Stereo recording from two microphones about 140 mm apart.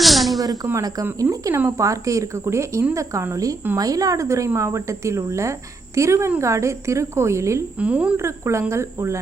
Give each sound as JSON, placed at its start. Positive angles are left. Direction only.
{"t": 0.0, "sound": "a sound", "side_deg": 0}
{"t": 0.6, "sound": "speech", "side_deg": -25}
{"t": 7.8, "sound": "speech", "side_deg": -10}
{"t": 8.2, "sound": "speech", "side_deg": -20}